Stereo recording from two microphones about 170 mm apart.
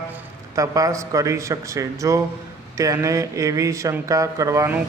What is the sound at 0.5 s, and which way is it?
Speech, 20° right (ahead or behind).